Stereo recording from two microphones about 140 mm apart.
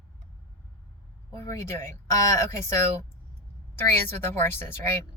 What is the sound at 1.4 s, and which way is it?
Speech, 20° left (ahead or behind).